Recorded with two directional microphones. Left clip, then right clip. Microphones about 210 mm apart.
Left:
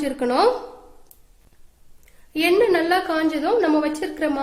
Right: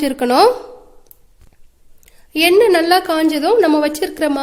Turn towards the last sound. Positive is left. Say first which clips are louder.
# right 6 dB
turn(degrees=-50)  # may be behind; listen again after turning